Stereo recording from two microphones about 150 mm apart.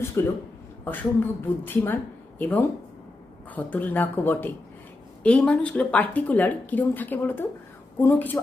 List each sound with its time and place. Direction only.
0.2 s a woman's voice: 20° left (ahead or behind)